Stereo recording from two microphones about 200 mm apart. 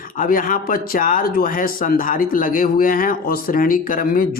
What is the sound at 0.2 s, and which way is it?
A man's voice, 45° left (ahead or behind).